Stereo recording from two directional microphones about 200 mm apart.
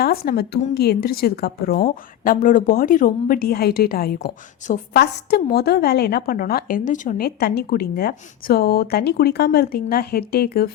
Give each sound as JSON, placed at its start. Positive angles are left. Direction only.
{"t": 0.0, "sound": "a woman's voice", "side_deg": 50}